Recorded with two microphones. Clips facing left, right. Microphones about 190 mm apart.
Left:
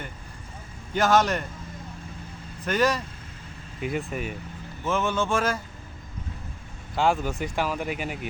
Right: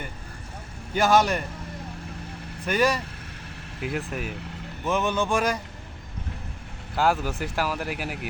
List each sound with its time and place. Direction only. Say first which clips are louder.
0.9 s speech: right 1 dB; 10° right (ahead or behind)
2.6 s speech: even; 10° right (ahead or behind)
4.9 s speech: right 1 dB; 15° right (ahead or behind)
6.9 s speech: even; 5° right (ahead or behind)